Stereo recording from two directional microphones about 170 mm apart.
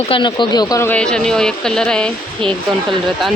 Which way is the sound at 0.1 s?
25° left (ahead or behind).